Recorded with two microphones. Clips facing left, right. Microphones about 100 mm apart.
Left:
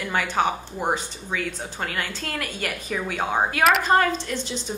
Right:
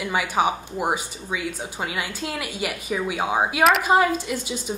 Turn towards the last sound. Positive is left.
turn(degrees=-10)  # may be behind; listen again after turning